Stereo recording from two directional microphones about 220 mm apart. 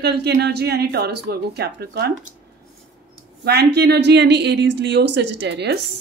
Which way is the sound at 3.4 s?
50° right (ahead or behind).